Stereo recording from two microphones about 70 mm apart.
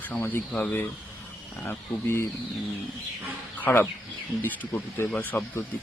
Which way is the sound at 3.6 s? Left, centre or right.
Left.